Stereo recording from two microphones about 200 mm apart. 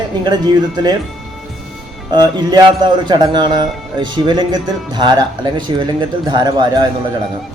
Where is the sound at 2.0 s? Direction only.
20° right (ahead or behind).